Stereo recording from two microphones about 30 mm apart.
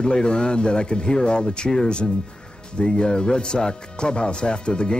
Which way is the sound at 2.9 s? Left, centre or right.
Left.